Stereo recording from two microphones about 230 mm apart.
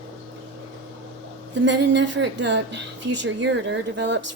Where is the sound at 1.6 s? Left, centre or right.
Right.